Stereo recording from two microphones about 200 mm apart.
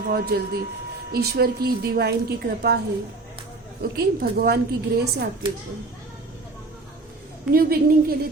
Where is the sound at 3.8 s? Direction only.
50° right (ahead or behind).